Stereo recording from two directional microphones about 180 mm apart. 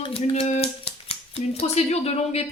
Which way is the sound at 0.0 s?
30° left (ahead or behind).